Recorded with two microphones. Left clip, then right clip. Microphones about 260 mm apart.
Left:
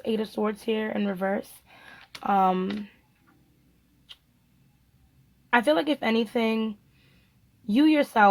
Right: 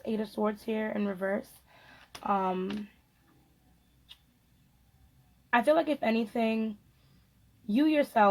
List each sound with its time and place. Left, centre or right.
0.0 s speech: left
5.5 s speech: left
7.7 s speech: left